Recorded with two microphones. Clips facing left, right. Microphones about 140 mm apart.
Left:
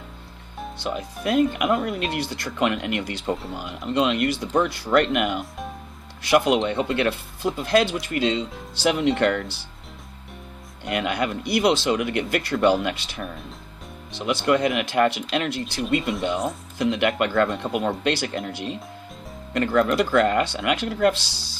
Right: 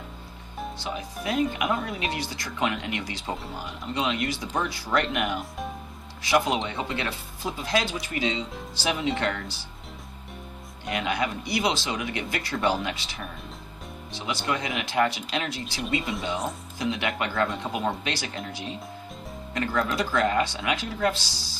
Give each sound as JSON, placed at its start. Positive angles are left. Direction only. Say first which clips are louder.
{"t": 0.8, "sound": "speech", "louder": "left 8 dB", "side_deg": 60}
{"t": 5.4, "sound": "speech", "louder": "left 1 dB", "side_deg": 0}
{"t": 6.2, "sound": "speech", "louder": "left 5 dB", "side_deg": 60}
{"t": 10.8, "sound": "speech", "louder": "left 3 dB", "side_deg": 60}
{"t": 16.0, "sound": "speech", "louder": "left 4 dB", "side_deg": 0}
{"t": 16.7, "sound": "speech", "louder": "left 7 dB", "side_deg": 60}